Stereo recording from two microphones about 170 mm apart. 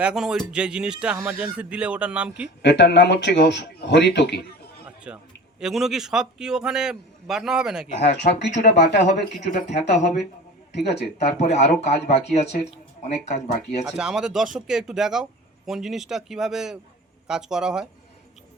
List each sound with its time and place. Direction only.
0.0 s speech: 5° right (ahead or behind)
2.6 s speech: 85° left
5.0 s speech: 5° right (ahead or behind)
8.0 s speech: 85° left
9.7 s speech: 40° left (ahead or behind)
10.7 s speech: 80° left
11.2 s speech: 40° left (ahead or behind)
13.8 s speech: 5° right (ahead or behind)